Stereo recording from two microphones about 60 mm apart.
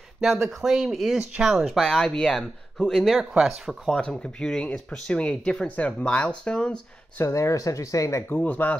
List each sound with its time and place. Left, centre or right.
0.2 s speech: centre
1.8 s speech: centre
4.0 s speech: centre
7.2 s speech: left
8.3 s speech: left